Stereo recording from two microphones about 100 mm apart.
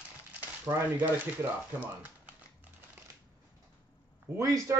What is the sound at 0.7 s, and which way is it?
Speech, 20° right (ahead or behind).